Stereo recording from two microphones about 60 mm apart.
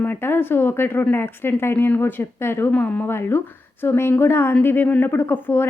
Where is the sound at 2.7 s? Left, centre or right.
Left.